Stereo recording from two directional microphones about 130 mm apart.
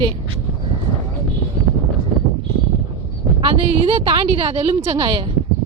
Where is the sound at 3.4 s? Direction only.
45° right (ahead or behind).